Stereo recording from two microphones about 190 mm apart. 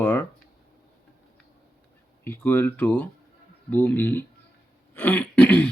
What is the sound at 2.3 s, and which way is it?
Speech, 10° left (ahead or behind).